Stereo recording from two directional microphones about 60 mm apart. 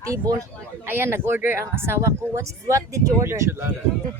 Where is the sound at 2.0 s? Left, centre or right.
Right.